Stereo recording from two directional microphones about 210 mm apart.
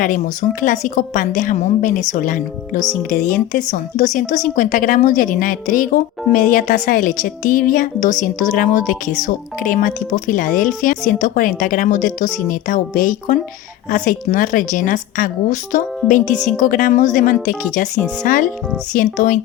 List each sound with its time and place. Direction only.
0.6 s speech: 40° left (ahead or behind)